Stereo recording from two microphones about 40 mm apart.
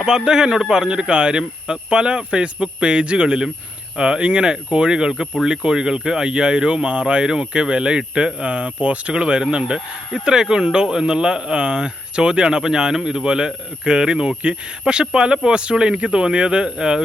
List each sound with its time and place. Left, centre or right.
0.0 s speech: centre